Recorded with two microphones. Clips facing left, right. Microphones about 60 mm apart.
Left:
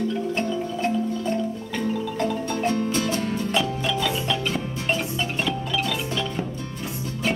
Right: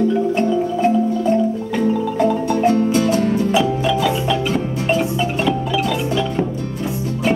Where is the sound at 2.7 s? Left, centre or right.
Right.